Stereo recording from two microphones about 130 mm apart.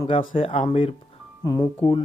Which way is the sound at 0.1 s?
45° left (ahead or behind).